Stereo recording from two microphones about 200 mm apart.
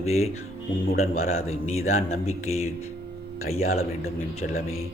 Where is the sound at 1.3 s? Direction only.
90° left.